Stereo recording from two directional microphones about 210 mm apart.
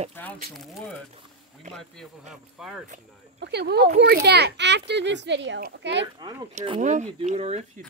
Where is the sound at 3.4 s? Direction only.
50° right (ahead or behind).